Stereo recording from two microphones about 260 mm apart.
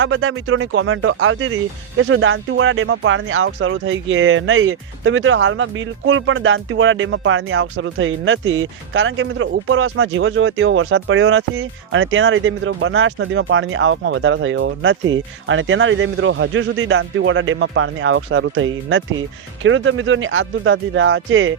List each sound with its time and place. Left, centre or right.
0.0 s speech: right